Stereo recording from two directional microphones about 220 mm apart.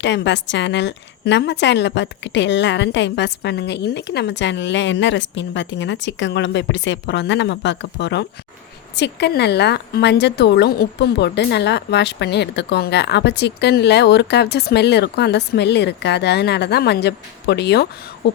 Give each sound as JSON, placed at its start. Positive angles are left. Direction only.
{"t": 0.0, "sound": "speech", "side_deg": 55}